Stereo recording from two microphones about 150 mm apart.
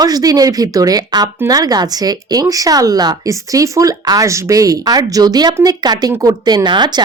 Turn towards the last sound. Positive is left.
turn(degrees=-30)  # may be behind; listen again after turning